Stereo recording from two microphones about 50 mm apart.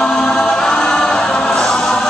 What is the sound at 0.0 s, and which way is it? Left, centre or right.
Choir, centre.